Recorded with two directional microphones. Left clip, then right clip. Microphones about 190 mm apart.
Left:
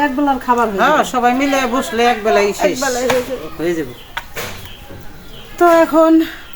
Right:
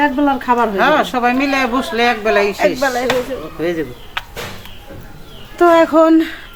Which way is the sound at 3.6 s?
30° left (ahead or behind).